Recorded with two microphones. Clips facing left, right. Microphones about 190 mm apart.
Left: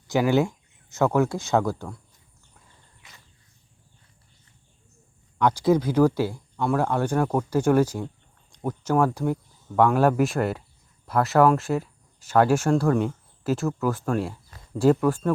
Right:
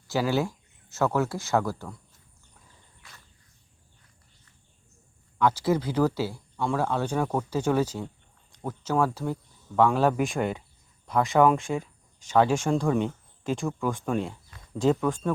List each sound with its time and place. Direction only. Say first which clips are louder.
0.1 s speech: left 5 dB; 15° left (ahead or behind)
5.4 s speech: left 4 dB; 15° left (ahead or behind)